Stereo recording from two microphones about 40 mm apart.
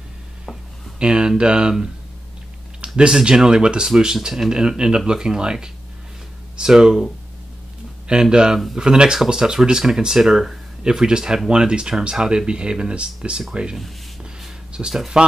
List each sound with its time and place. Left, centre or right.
0.9 s speech: right
3.1 s speech: centre
8.1 s speech: right
14.7 s a sound: right